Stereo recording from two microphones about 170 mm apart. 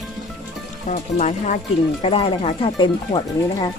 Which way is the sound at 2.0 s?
35° left (ahead or behind).